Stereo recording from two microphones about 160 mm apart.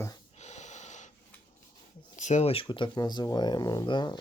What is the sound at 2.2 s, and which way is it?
Speech, 50° left (ahead or behind).